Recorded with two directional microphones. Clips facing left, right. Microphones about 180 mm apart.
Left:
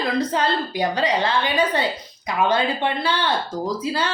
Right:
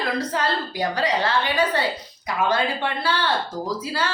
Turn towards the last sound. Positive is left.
turn(degrees=20)  # may be behind; listen again after turning